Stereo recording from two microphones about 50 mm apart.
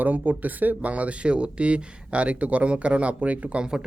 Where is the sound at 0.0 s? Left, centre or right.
Right.